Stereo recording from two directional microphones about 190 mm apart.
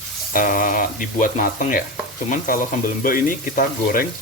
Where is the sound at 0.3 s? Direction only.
45° left (ahead or behind).